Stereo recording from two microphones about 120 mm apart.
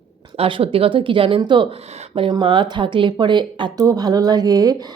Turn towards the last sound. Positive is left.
turn(degrees=-30)  # may be behind; listen again after turning